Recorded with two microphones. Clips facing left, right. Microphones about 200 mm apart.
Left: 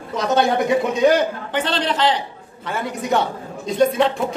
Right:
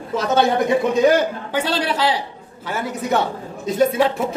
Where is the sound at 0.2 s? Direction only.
5° right (ahead or behind).